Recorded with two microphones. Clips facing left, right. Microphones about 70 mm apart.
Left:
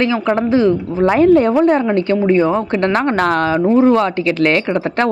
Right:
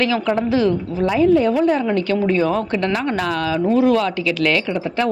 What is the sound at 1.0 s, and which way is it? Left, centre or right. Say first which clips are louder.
Speech: left 4 dB; left.